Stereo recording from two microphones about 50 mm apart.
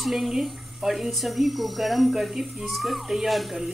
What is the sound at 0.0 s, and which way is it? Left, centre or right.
Speech, centre.